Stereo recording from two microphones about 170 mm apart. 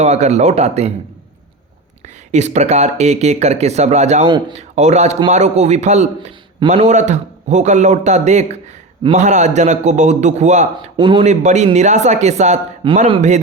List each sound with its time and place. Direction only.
0.0 s speech: 40° right (ahead or behind)
2.3 s a man's voice: 40° right (ahead or behind)
10.9 s speech: 25° right (ahead or behind)
11.2 s speech: 45° right (ahead or behind)